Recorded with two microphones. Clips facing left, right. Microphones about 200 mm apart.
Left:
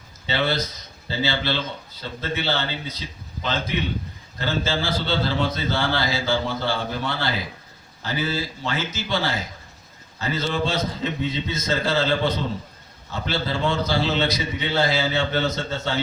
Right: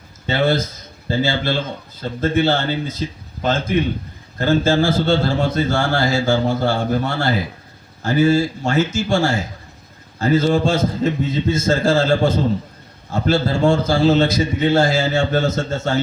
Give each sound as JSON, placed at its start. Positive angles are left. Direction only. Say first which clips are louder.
{"t": 0.3, "sound": "a man's voice", "louder": "right 6 dB", "side_deg": -50}